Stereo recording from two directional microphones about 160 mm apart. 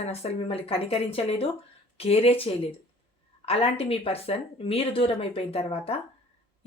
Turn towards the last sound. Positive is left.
turn(degrees=35)  # may be behind; listen again after turning